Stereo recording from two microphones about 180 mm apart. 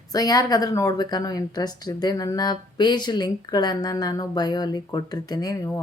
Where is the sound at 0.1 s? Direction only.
20° left (ahead or behind).